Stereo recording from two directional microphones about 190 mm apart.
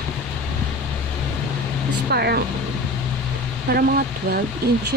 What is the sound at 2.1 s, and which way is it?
Speech, 55° right (ahead or behind).